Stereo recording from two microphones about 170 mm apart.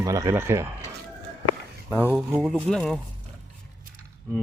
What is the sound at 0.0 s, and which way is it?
Speech, 20° right (ahead or behind).